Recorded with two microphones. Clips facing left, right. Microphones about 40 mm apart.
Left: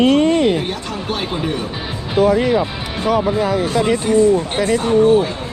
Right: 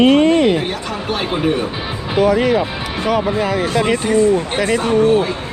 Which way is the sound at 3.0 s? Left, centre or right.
Right.